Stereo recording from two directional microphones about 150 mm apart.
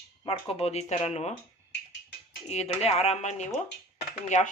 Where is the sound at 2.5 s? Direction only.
45° left (ahead or behind).